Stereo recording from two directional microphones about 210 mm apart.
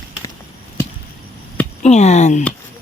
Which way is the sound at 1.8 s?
30° left (ahead or behind).